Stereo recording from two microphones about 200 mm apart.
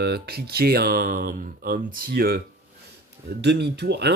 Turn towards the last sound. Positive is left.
turn(degrees=-55)  # may be behind; listen again after turning